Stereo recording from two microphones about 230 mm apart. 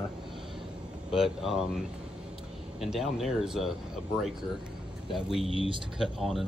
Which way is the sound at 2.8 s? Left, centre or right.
Centre.